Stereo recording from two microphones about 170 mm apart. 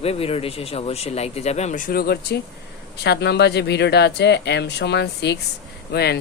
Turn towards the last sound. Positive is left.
turn(degrees=70)  # may be behind; listen again after turning